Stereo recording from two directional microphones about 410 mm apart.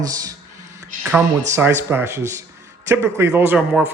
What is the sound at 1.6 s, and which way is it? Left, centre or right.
Speech, centre.